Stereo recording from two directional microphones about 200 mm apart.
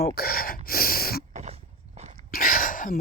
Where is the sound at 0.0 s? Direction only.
50° left (ahead or behind).